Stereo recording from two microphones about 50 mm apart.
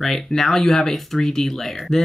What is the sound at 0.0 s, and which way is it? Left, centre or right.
Speech, centre.